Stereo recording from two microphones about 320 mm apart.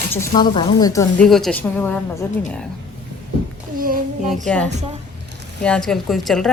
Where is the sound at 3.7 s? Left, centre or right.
Right.